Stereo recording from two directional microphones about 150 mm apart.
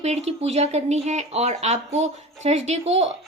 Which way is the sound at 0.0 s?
45° right (ahead or behind).